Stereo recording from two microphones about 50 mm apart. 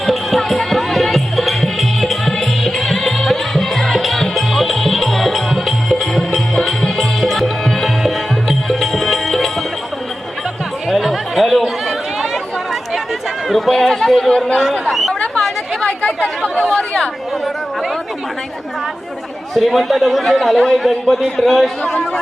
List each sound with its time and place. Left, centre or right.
0.0 s music: centre
10.8 s chatter: centre
13.5 s run: centre
14.6 s a sound: centre
15.4 s chatter: centre
15.9 s chatter: left
16.4 s chatter: centre
16.7 s chatter: centre
19.5 s a man's voice: centre